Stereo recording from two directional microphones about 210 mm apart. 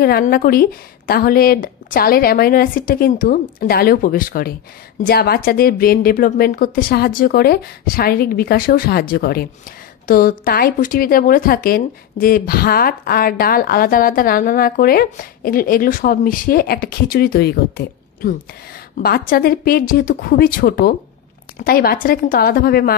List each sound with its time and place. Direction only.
0.0 s speech: 45° left (ahead or behind)